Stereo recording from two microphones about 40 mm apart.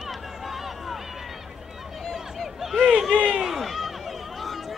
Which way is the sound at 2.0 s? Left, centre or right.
Centre.